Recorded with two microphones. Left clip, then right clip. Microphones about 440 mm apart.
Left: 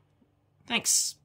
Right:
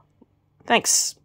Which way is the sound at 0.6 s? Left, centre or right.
Centre.